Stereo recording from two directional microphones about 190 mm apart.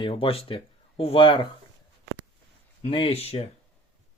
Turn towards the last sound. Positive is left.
turn(degrees=35)  # may be behind; listen again after turning